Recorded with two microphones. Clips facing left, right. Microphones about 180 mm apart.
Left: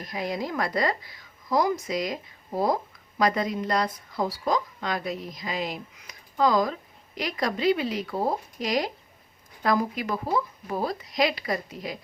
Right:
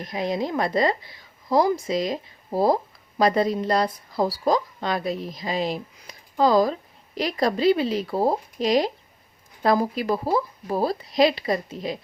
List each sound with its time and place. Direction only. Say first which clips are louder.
0.0 s a woman's voice: right 4 dB; 25° right (ahead or behind)